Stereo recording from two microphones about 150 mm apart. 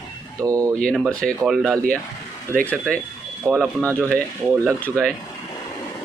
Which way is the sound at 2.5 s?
10° left (ahead or behind).